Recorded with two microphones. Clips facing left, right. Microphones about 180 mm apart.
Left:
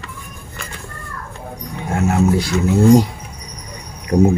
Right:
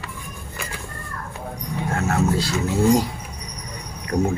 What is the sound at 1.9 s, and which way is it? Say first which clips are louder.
Speech: left 6 dB; 15° left (ahead or behind).